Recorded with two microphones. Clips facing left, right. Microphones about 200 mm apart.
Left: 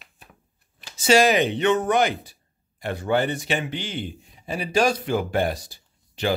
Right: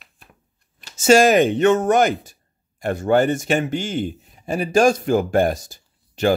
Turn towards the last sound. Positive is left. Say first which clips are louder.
# right 6 dB
turn(degrees=-45)  # may be behind; listen again after turning